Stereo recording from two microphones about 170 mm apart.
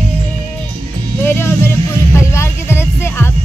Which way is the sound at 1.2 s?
15° left (ahead or behind).